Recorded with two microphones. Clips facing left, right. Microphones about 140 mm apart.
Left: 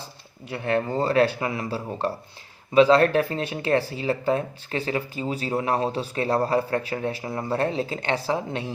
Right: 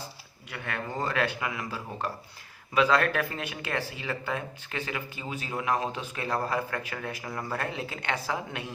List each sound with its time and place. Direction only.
0.5 s speech: 35° left (ahead or behind)